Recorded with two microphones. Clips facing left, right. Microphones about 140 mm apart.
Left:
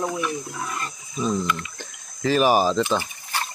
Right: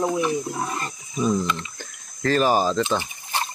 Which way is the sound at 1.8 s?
10° left (ahead or behind).